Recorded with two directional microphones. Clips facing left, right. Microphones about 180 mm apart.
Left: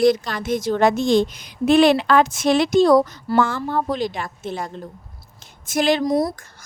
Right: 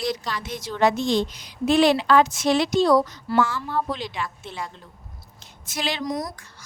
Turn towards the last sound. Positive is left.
turn(degrees=30)  # may be behind; listen again after turning